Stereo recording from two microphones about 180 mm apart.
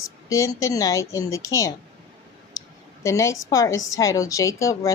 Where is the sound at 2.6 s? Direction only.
15° left (ahead or behind).